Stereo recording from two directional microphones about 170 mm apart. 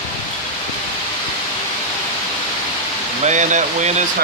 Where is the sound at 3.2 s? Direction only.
45° right (ahead or behind).